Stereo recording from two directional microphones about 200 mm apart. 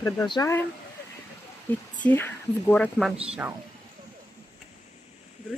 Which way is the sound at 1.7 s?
10° left (ahead or behind).